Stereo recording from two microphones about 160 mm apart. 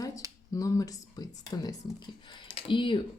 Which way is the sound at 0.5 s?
20° left (ahead or behind).